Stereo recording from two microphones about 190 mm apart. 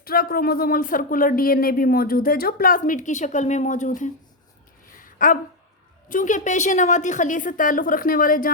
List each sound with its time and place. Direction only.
0.0 s speech: 50° left (ahead or behind)
4.9 s a sound: 45° left (ahead or behind)
6.1 s speech: 45° left (ahead or behind)